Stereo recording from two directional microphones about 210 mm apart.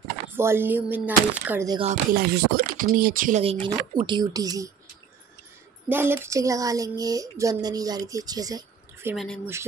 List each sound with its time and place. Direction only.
0.4 s speech: 10° right (ahead or behind)
2.1 s speech: 45° right (ahead or behind); by 4.6 s 15° right (ahead or behind)
5.9 s speech: 10° right (ahead or behind)
9.1 s speech: centre (ahead or behind)